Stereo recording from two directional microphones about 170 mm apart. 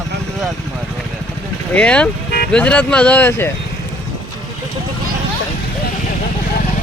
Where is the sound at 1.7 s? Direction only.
5° left (ahead or behind).